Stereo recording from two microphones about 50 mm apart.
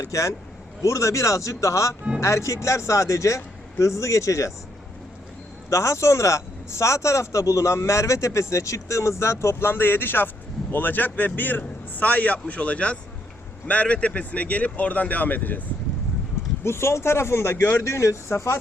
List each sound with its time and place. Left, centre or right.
0.1 s a man's voice: left
5.7 s a man's voice: left
16.6 s speech: left
17.8 s speech: left